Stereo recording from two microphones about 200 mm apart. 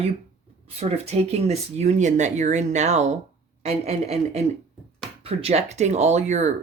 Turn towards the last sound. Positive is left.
turn(degrees=-35)  # may be behind; listen again after turning